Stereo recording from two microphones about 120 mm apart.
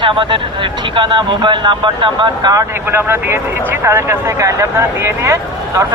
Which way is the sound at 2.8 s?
20° right (ahead or behind).